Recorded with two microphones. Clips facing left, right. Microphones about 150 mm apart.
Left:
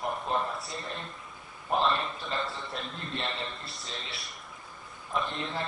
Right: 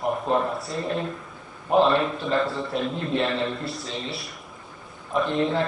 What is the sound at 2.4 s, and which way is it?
A man's voice, centre (ahead or behind).